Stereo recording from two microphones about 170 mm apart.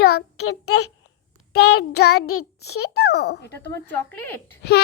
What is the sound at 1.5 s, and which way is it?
A child's voice, 75° left (ahead or behind).